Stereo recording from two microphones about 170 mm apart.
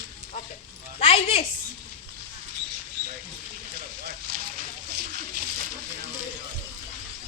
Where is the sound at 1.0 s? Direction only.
35° left (ahead or behind).